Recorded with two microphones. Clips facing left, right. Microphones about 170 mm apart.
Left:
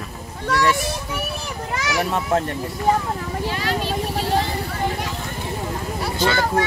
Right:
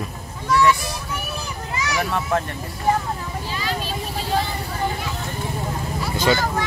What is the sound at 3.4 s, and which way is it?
Vehicle, 65° left (ahead or behind).